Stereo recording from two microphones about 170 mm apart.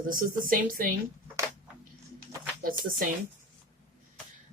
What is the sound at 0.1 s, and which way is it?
Speech, 55° right (ahead or behind).